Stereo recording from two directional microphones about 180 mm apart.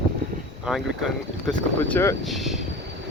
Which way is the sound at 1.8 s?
10° left (ahead or behind).